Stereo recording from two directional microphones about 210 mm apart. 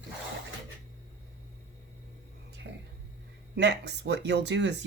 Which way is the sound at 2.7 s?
55° right (ahead or behind).